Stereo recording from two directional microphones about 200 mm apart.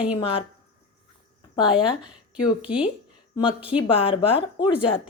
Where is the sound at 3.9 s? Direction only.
25° left (ahead or behind).